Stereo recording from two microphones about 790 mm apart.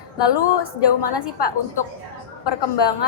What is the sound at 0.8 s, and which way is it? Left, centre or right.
A woman's voice, left.